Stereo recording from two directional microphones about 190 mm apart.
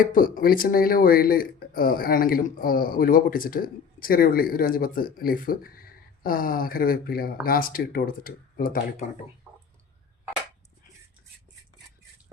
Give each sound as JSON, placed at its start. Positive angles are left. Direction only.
{"t": 0.0, "sound": "speech", "side_deg": 45}